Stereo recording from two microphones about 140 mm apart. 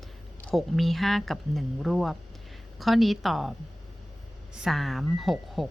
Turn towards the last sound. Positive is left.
turn(degrees=0)  # may be behind; listen again after turning